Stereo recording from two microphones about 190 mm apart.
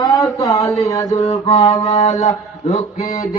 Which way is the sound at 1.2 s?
35° left (ahead or behind).